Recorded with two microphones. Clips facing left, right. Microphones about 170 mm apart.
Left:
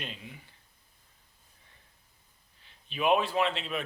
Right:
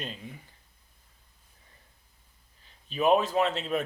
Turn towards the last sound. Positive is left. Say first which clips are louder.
# right 3 dB
turn(degrees=-45)  # may be behind; listen again after turning